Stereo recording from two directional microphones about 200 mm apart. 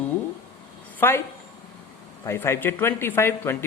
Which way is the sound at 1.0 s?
10° left (ahead or behind).